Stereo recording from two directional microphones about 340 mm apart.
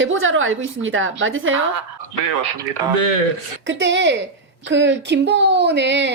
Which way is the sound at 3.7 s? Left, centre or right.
Right.